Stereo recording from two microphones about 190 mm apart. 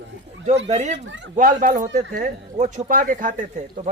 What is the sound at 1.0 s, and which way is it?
Speech, 65° right (ahead or behind).